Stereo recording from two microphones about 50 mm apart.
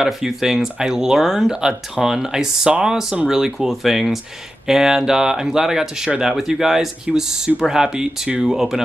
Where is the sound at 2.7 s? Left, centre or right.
Centre.